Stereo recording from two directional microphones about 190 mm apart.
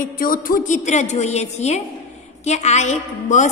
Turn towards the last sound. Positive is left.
turn(degrees=40)  # may be behind; listen again after turning